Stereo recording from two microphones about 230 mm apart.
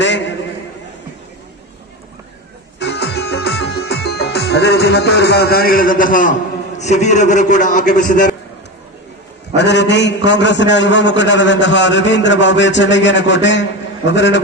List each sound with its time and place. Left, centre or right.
2.7 s music: left
6.7 s a man's voice: left
9.6 s a man's voice: left